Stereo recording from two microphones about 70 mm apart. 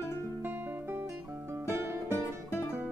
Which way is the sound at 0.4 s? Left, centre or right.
Right.